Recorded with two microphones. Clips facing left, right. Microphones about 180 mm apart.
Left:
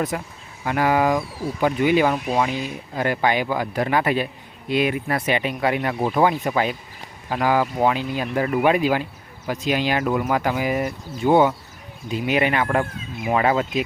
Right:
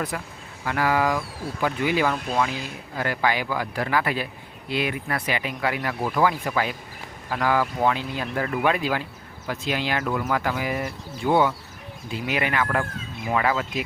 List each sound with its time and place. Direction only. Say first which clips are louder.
0.1 s speech: left 4 dB; 25° left (ahead or behind)